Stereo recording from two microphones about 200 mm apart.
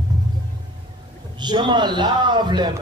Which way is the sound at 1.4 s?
20° right (ahead or behind).